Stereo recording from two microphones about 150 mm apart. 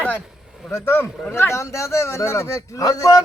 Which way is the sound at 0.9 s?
15° left (ahead or behind).